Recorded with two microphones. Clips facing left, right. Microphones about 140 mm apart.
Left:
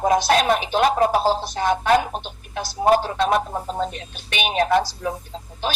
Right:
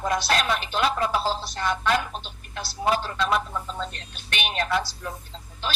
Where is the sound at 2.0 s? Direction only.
60° left (ahead or behind).